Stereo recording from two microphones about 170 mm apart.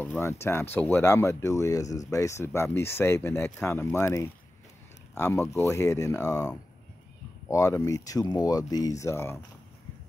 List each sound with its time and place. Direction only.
0.0 s speech: 15° left (ahead or behind)